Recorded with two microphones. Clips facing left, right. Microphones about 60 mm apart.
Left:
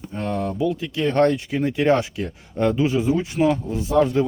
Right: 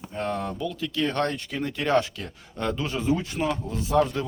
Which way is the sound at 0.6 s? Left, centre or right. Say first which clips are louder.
Left 7 dB; left.